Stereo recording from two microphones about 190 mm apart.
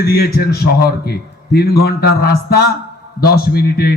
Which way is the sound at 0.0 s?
55° left (ahead or behind).